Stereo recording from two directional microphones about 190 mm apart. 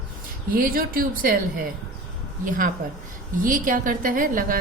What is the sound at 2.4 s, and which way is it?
A woman's voice, 45° right (ahead or behind).